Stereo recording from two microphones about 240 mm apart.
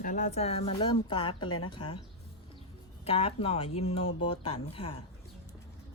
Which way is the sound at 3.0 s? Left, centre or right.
Left.